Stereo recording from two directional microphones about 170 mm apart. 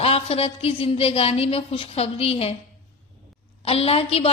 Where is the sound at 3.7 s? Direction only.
35° left (ahead or behind).